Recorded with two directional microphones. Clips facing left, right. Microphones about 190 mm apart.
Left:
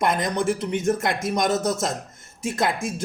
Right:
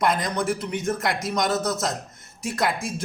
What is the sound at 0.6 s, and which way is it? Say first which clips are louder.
Speech: left 3 dB; 25° left (ahead or behind).